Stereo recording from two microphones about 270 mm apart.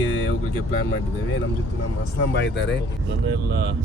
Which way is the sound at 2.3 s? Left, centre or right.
Left.